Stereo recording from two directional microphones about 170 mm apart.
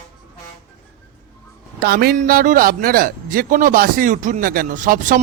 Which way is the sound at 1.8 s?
65° right (ahead or behind).